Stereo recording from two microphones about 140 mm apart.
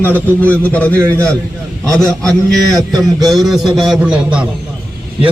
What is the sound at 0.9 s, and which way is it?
Speech, 20° right (ahead or behind).